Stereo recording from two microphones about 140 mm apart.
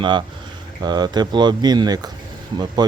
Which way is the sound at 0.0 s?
35° right (ahead or behind).